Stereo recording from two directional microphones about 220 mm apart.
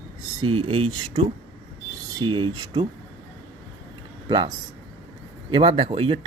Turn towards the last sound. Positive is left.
turn(degrees=-25)  # may be behind; listen again after turning